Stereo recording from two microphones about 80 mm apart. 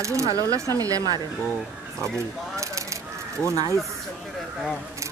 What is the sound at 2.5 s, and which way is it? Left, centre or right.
Coin, right.